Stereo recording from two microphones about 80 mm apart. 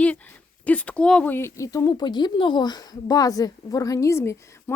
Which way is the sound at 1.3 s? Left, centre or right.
Left.